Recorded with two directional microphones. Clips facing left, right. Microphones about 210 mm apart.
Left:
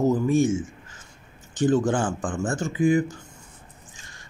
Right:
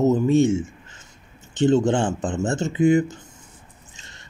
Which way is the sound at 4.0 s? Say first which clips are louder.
Right 1 dB; 25° right (ahead or behind).